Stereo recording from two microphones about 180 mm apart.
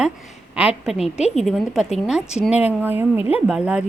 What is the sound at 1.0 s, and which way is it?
Speech, 35° left (ahead or behind).